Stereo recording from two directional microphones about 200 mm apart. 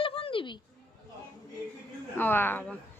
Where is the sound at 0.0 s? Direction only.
25° left (ahead or behind).